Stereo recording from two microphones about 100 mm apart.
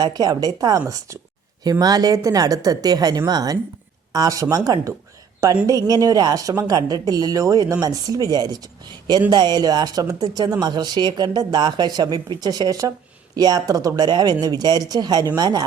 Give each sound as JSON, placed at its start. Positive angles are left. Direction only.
{"t": 0.0, "sound": "a woman's voice", "side_deg": -45}